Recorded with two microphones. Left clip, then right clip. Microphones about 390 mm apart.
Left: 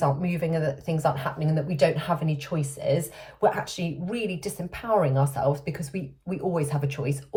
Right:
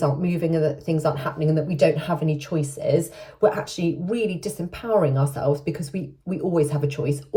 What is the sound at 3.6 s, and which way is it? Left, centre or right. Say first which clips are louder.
Speech: right 7 dB; centre.